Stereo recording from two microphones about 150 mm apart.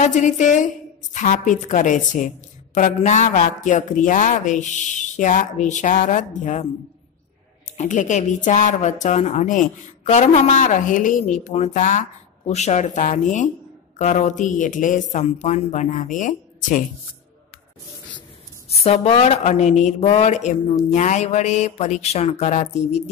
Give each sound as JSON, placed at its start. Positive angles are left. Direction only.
{"t": 0.0, "sound": "speech", "side_deg": 55}
{"t": 7.7, "sound": "speech", "side_deg": 55}
{"t": 18.7, "sound": "mantra", "side_deg": 45}